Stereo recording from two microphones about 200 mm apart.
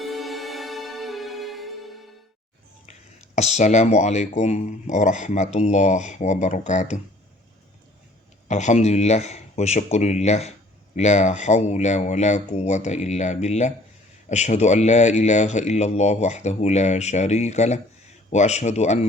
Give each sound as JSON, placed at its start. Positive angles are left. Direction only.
{"t": 0.0, "sound": "music", "side_deg": 0}
{"t": 3.3, "sound": "speech", "side_deg": 35}
{"t": 8.4, "sound": "speech", "side_deg": 35}